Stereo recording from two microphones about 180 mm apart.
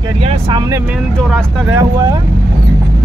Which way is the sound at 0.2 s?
30° right (ahead or behind).